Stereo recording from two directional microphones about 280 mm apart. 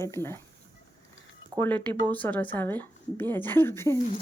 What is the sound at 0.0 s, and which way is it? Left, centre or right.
Speech, centre.